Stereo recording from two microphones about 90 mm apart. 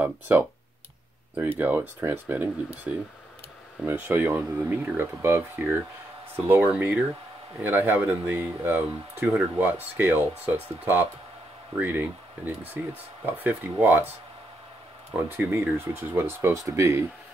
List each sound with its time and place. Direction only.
0.0 s speech: 20° right (ahead or behind)
1.6 s speech: 20° right (ahead or behind)
15.2 s speech: 25° right (ahead or behind)